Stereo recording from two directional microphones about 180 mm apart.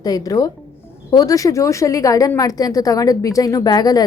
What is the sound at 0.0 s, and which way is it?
A woman's voice, 20° left (ahead or behind).